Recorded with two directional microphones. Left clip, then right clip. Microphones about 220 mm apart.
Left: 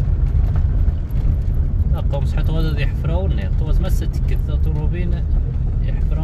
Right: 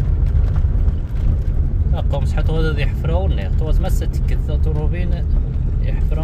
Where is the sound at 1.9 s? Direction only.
20° right (ahead or behind).